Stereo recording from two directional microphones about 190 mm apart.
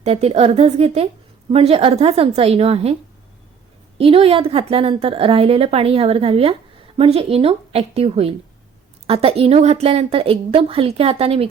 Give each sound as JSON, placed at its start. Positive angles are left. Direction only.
{"t": 0.0, "sound": "a woman's voice", "side_deg": -35}
{"t": 3.9, "sound": "a woman's voice", "side_deg": -30}